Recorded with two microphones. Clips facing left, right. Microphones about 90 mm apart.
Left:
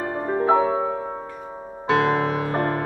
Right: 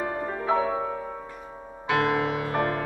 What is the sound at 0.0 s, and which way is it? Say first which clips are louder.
Music: left 6 dB; 35° left (ahead or behind).